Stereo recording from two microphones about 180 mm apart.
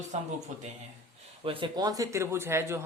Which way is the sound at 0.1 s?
40° right (ahead or behind).